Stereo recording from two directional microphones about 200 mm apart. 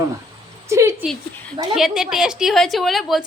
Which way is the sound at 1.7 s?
Centre (ahead or behind).